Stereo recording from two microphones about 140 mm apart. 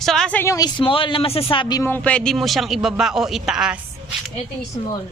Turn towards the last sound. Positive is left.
turn(degrees=-5)  # may be behind; listen again after turning